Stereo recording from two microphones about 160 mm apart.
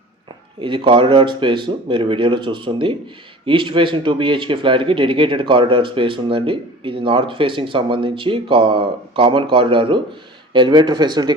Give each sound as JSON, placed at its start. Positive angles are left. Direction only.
{"t": 0.6, "sound": "speech", "side_deg": -30}